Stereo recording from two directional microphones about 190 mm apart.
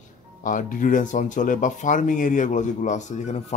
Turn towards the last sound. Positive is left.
turn(degrees=40)  # may be behind; listen again after turning